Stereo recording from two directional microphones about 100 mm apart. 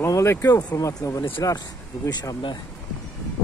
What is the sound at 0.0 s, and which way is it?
Speech, 30° left (ahead or behind).